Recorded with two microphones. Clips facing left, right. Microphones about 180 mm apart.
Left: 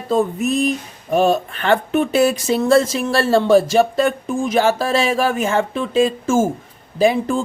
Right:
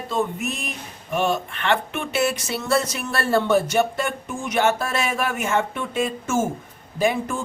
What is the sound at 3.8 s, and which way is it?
Speech, 30° left (ahead or behind).